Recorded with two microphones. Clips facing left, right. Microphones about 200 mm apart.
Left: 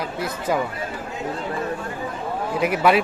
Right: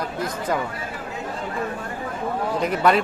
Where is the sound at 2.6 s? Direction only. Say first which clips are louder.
Left 2 dB; 5° left (ahead or behind).